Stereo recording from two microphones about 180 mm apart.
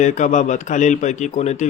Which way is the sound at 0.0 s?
40° left (ahead or behind).